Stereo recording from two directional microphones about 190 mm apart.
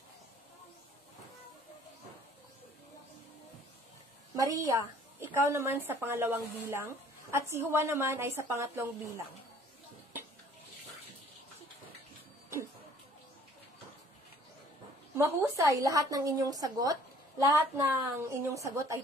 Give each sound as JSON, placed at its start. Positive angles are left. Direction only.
{"t": 4.4, "sound": "a woman's voice", "side_deg": -15}
{"t": 15.1, "sound": "a woman's voice", "side_deg": -15}